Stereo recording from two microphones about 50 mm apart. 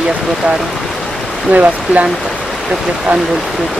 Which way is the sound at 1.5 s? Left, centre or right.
Right.